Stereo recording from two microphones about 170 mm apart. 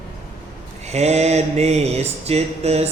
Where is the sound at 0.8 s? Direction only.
40° right (ahead or behind).